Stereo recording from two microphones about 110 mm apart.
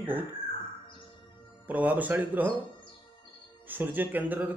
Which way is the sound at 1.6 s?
15° right (ahead or behind).